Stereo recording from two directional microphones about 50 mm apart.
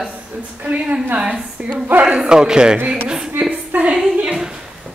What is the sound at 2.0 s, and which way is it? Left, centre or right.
Speech, centre.